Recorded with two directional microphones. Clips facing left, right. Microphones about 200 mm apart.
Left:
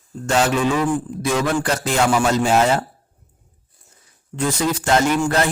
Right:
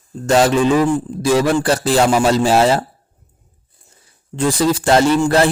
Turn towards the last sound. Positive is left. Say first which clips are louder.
# right 5 dB
turn(degrees=-30)  # may be behind; listen again after turning